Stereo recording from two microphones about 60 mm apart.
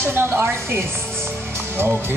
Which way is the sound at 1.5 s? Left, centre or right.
Right.